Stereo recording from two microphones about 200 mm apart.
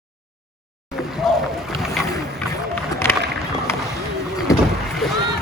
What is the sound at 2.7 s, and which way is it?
Rowboat, 10° left (ahead or behind).